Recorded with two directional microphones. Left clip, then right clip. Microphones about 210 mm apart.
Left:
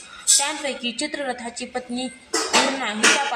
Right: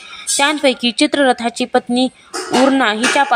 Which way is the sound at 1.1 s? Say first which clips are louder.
Right 14 dB; 55° right (ahead or behind).